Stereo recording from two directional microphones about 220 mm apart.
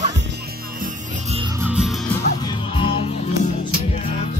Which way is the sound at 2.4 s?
25° left (ahead or behind).